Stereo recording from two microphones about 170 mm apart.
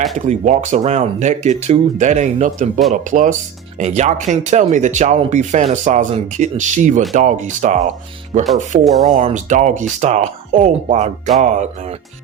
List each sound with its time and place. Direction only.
0.3 s speech: 45° right (ahead or behind)
8.8 s speech: centre (ahead or behind)
9.1 s speech: 45° right (ahead or behind)